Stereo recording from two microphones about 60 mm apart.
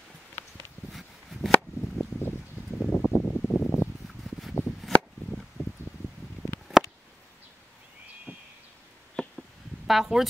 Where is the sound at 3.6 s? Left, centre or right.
Left.